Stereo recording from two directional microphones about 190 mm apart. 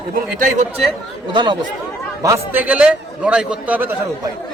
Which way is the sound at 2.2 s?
15° right (ahead or behind).